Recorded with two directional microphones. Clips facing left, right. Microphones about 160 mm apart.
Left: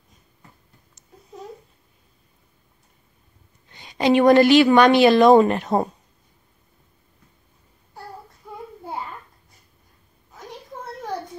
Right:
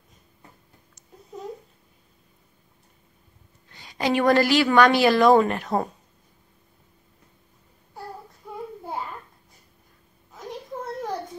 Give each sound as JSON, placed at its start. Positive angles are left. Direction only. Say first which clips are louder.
{"t": 3.7, "sound": "a woman's voice", "louder": "left 6 dB", "side_deg": 20}